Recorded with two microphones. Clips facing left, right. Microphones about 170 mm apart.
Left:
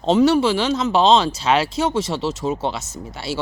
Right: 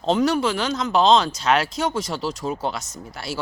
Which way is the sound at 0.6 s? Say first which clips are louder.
Left 2 dB; 30° left (ahead or behind).